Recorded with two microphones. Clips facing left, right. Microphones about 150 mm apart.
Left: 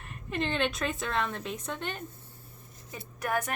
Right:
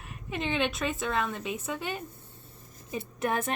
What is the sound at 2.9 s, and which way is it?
Speech, 25° right (ahead or behind).